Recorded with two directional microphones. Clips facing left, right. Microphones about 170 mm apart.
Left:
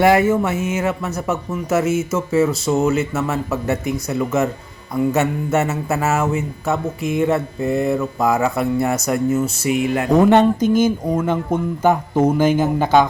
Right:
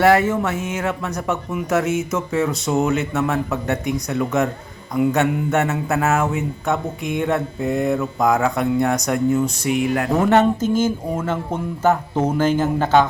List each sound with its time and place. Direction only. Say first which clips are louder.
0.0 s speech: left 1 dB; 10° left (ahead or behind)
10.1 s speech: left 4 dB; 15° left (ahead or behind)